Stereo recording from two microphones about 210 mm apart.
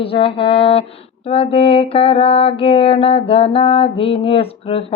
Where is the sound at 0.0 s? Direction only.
25° left (ahead or behind).